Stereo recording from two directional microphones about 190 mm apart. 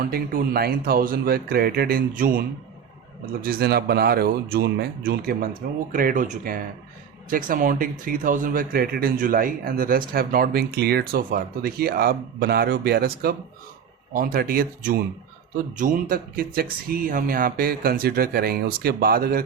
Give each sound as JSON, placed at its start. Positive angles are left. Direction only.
{"t": 0.0, "sound": "speech", "side_deg": -50}
{"t": 3.4, "sound": "speech", "side_deg": -55}